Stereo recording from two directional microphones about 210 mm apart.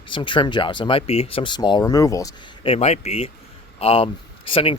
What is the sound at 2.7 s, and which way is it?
Speech, 30° left (ahead or behind).